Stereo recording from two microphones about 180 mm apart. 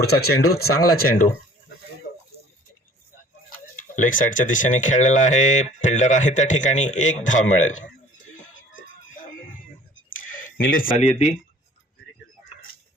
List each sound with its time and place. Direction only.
0.0 s speech: 60° left (ahead or behind)
3.8 s speech: 45° left (ahead or behind)
9.1 s music: 50° left (ahead or behind)
10.3 s a sound: 50° left (ahead or behind)